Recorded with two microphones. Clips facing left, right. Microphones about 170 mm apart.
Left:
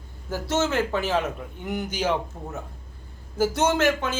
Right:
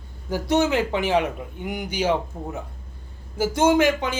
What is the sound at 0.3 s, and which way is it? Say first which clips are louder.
A man's voice: right 4 dB; 15° right (ahead or behind).